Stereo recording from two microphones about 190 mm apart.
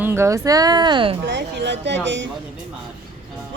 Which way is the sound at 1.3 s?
65° right (ahead or behind).